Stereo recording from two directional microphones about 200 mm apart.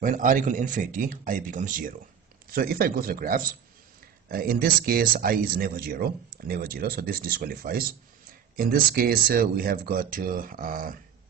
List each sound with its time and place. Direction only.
0.0 s speech: 40° right (ahead or behind)